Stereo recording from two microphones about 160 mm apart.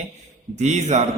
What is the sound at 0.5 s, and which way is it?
Speech, 45° right (ahead or behind).